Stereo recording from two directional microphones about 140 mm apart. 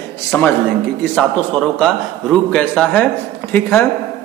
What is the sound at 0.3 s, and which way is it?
A man's voice, 15° left (ahead or behind).